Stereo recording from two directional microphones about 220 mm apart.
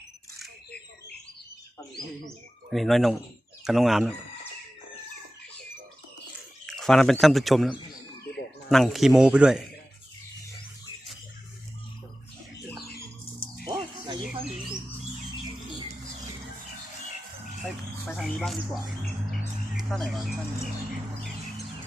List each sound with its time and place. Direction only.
2.2 s speech: centre (ahead or behind)
6.7 s speech: centre (ahead or behind)
13.7 s music: 20° right (ahead or behind)
18.2 s speech: centre (ahead or behind)
19.9 s speech: centre (ahead or behind)